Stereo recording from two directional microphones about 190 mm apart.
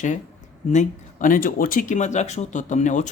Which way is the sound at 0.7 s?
40° left (ahead or behind).